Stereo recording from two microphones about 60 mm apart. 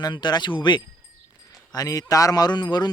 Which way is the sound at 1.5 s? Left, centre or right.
Left.